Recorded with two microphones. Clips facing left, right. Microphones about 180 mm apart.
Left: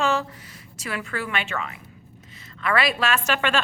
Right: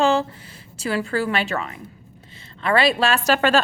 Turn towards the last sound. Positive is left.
turn(degrees=-40)  # may be behind; listen again after turning